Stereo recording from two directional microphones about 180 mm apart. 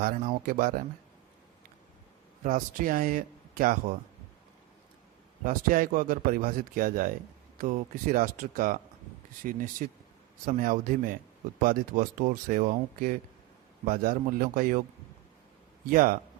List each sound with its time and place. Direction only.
0.0 s speech: 50° right (ahead or behind)
2.4 s speech: 45° right (ahead or behind)
5.5 s speech: 50° right (ahead or behind)
15.9 s speech: 50° right (ahead or behind)